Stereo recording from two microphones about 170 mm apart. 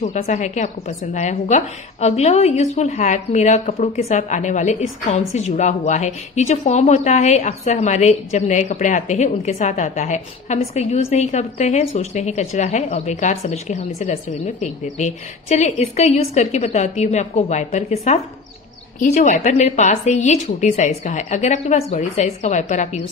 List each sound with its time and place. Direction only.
0.0 s a woman's voice: 45° left (ahead or behind)